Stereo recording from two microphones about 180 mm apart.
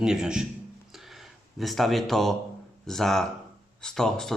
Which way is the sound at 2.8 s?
Centre (ahead or behind).